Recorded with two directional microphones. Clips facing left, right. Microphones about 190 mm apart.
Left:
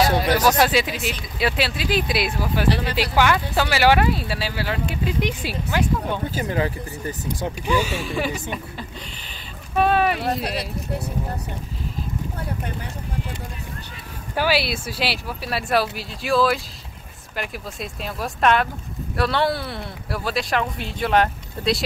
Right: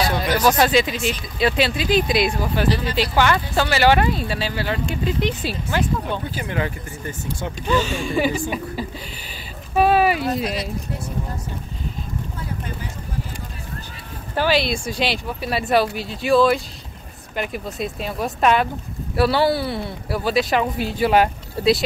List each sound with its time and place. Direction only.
0.2 s speech: 10° left (ahead or behind)
6.3 s speech: 35° left (ahead or behind)
7.6 s speech: 10° left (ahead or behind)
14.3 s speech: 10° left (ahead or behind)